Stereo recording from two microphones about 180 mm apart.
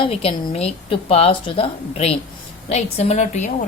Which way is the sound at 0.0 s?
30° left (ahead or behind).